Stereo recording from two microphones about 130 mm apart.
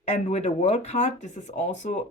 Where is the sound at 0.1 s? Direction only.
60° left (ahead or behind).